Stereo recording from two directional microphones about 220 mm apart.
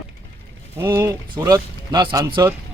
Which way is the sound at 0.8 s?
10° right (ahead or behind).